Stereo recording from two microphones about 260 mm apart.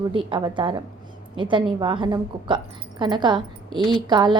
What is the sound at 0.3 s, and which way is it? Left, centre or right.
A woman's voice, centre.